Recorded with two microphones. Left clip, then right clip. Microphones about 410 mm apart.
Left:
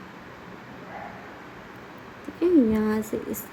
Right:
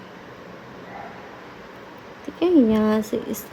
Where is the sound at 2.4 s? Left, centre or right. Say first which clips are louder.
Right 3 dB; centre.